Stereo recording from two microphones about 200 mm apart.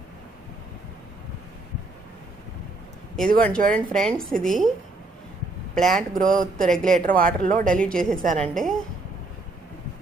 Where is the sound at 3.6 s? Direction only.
45° right (ahead or behind).